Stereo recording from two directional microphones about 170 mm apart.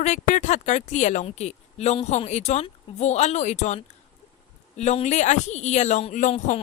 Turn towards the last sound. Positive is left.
turn(degrees=40)  # may be behind; listen again after turning